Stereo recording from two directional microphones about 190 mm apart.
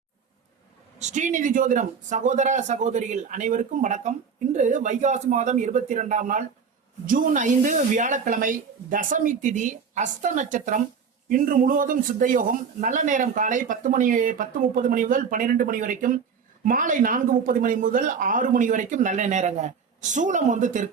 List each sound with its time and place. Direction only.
0.9 s a man's voice: 40° right (ahead or behind)